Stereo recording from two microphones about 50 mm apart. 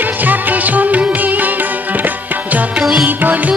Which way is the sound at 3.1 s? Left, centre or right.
Right.